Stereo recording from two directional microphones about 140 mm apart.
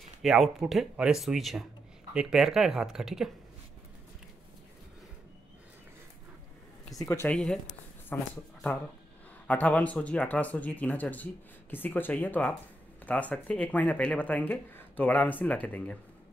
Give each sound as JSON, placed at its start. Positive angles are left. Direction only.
{"t": 0.2, "sound": "speech", "side_deg": 0}
{"t": 7.0, "sound": "speech", "side_deg": 15}
{"t": 7.3, "sound": "speech", "side_deg": 5}